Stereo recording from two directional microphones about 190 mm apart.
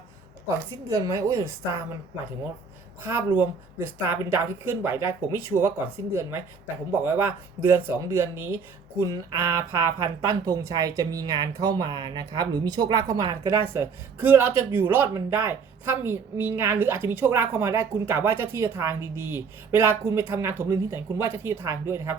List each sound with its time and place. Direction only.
0.4 s speech: 15° right (ahead or behind)
3.1 s speech: 10° right (ahead or behind)
7.0 s speech: 15° right (ahead or behind)